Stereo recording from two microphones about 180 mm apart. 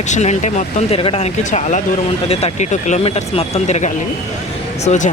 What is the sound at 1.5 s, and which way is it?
Speech, 45° left (ahead or behind).